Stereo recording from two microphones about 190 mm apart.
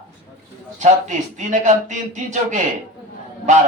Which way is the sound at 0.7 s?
40° right (ahead or behind).